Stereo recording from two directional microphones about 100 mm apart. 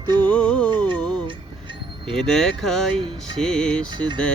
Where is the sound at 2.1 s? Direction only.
5° left (ahead or behind).